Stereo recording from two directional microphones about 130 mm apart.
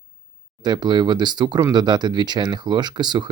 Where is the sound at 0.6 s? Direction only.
35° right (ahead or behind).